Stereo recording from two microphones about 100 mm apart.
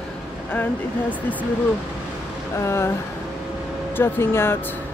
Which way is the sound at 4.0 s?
25° left (ahead or behind).